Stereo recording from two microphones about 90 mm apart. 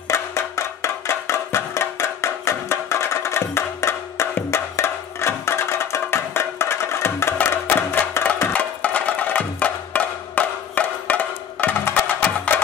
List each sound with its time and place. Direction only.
0.1 s music: 30° left (ahead or behind)
8.5 s wood block: 15° left (ahead or behind)